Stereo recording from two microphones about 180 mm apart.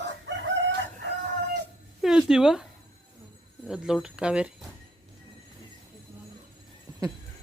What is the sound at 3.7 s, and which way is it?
Speech, 5° right (ahead or behind).